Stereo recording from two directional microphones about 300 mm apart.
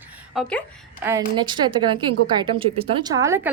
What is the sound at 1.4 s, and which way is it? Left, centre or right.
A woman's voice, centre.